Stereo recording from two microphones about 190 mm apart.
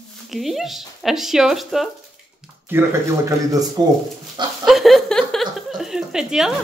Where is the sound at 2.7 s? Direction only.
15° right (ahead or behind).